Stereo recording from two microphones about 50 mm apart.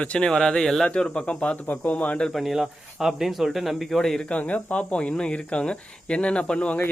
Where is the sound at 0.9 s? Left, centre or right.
Left.